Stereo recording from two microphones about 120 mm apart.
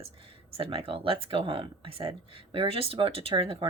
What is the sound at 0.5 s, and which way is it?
Speech, 50° right (ahead or behind).